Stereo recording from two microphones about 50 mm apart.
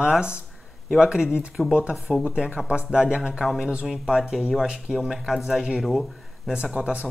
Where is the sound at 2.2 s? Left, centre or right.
Right; by 3.7 s centre.